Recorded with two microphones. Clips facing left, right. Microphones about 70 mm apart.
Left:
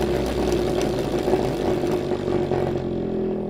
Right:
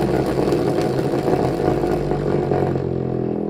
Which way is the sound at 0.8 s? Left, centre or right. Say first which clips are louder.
Right 3 dB; right.